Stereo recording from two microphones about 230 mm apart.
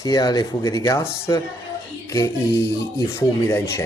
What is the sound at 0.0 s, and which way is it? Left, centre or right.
Speech, centre.